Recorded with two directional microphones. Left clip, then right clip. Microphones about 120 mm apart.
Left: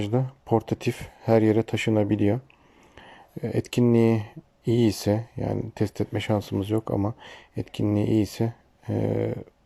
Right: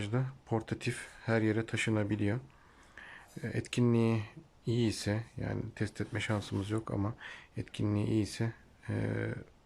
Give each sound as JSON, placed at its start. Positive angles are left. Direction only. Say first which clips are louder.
{"t": 0.0, "sound": "speech", "louder": "left 10 dB", "side_deg": 35}
{"t": 2.9, "sound": "a sound", "louder": "left 5 dB", "side_deg": 35}
{"t": 3.9, "sound": "speech", "louder": "left 10 dB", "side_deg": 40}